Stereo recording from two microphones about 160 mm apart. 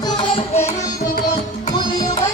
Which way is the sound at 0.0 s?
30° left (ahead or behind).